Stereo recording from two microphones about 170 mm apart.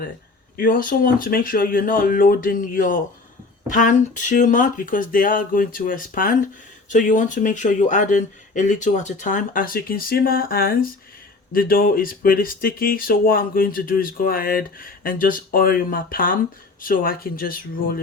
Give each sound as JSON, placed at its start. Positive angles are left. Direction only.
{"t": 0.5, "sound": "speech", "side_deg": 55}